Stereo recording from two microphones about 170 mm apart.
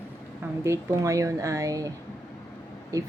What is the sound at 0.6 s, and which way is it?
Speech, 15° right (ahead or behind).